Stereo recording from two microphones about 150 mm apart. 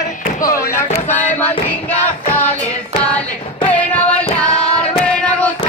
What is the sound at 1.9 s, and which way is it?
Music, 10° left (ahead or behind).